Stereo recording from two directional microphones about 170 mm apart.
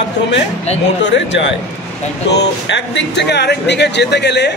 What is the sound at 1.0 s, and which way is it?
Speech, 90° left.